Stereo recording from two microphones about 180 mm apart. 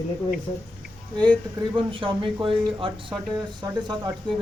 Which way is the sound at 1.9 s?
30° right (ahead or behind).